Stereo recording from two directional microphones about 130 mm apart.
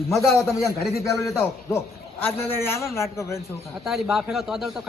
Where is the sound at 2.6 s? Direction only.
20° left (ahead or behind).